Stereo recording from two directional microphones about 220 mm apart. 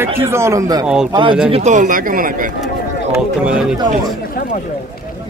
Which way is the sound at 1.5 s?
35° right (ahead or behind).